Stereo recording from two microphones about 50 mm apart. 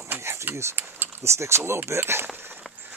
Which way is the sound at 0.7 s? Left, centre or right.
Right.